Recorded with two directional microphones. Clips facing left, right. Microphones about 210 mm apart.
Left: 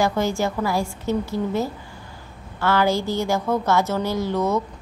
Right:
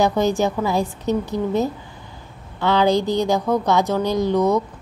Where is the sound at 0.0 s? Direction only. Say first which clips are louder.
Right 3 dB; 20° right (ahead or behind).